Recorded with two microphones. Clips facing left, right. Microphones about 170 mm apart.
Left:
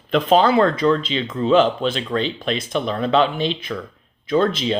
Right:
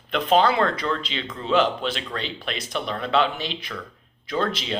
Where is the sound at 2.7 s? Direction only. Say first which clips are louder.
Left 4 dB; 25° left (ahead or behind).